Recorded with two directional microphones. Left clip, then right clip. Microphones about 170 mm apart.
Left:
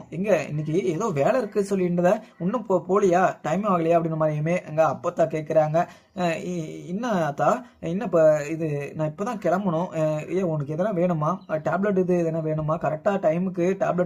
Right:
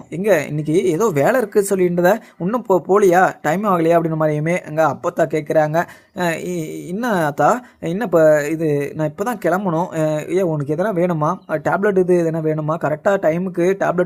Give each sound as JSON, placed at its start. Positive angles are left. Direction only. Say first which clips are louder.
{"t": 0.2, "sound": "speech", "louder": "right 7 dB", "side_deg": -50}